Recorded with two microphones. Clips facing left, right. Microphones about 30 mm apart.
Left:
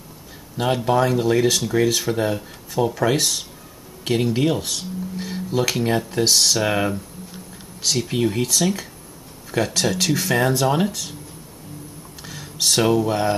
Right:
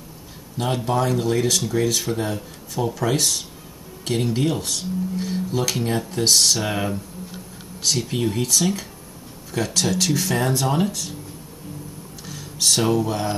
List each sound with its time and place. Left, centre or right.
0.6 s speech: centre
12.3 s a sound: centre
13.1 s speech: centre